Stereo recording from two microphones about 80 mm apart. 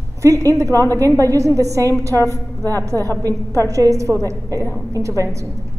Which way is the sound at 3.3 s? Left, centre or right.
Left.